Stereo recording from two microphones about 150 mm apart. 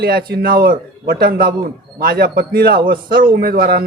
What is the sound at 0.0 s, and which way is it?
A man's voice, 90° right.